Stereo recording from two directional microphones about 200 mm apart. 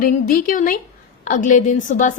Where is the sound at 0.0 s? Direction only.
45° left (ahead or behind).